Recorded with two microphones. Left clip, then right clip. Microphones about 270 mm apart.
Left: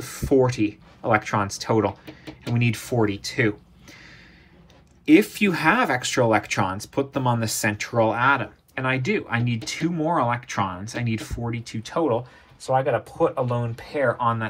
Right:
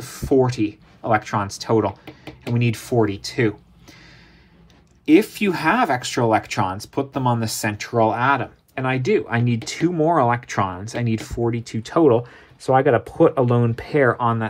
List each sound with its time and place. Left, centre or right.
0.0 s speech: centre
5.0 s speech: centre